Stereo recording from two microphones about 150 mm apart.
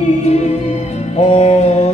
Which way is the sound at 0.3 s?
45° left (ahead or behind).